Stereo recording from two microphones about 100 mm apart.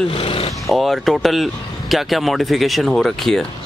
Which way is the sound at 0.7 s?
Centre (ahead or behind).